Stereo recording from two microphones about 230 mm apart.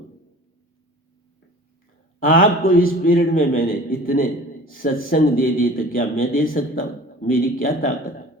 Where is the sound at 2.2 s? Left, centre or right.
Left.